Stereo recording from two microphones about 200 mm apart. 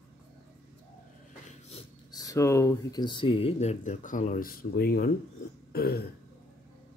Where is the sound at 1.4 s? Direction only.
30° left (ahead or behind).